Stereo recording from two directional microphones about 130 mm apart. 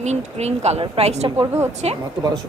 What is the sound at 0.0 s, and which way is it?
A woman's voice, 60° right (ahead or behind).